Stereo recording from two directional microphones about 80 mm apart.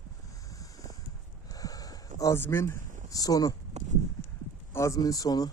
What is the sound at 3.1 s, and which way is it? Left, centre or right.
Speech, left.